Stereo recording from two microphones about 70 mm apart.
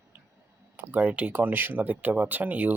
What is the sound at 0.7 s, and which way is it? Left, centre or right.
Speech, right.